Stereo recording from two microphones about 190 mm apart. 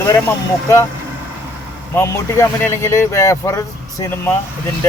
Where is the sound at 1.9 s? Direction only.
15° left (ahead or behind).